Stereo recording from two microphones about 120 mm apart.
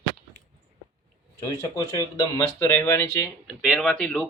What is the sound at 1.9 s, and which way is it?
Speech, 25° left (ahead or behind).